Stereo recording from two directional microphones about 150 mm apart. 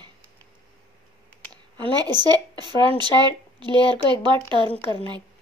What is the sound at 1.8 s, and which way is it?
Speech, 30° right (ahead or behind).